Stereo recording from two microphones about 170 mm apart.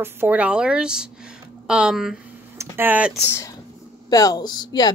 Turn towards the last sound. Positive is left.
turn(degrees=25)  # may be behind; listen again after turning